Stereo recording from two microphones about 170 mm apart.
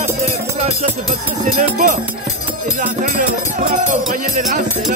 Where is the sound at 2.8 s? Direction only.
50° right (ahead or behind).